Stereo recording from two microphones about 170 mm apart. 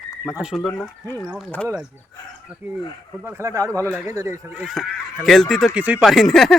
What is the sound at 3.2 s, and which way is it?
Speech, 15° right (ahead or behind).